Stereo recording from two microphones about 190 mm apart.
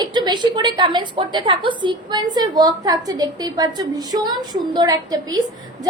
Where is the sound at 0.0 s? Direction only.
25° right (ahead or behind).